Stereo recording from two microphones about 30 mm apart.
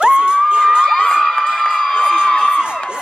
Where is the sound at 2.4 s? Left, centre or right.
Right.